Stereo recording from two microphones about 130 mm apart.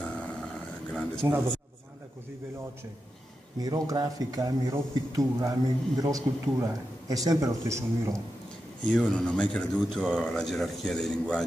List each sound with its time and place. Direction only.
0.1 s dog: 10° left (ahead or behind)
1.2 s a man's voice: 25° right (ahead or behind)
3.5 s a man's voice: 30° right (ahead or behind)
8.8 s speech: 5° left (ahead or behind)